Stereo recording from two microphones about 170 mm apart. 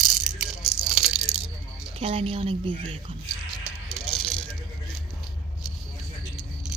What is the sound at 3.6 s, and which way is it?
Rattle, centre (ahead or behind).